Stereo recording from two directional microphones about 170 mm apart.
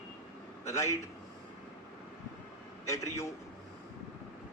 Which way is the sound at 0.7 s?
20° left (ahead or behind).